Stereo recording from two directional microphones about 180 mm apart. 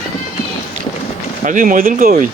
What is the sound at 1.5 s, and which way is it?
Speech, 50° right (ahead or behind).